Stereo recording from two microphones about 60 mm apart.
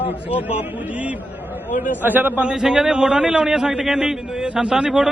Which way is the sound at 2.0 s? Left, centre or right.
Right.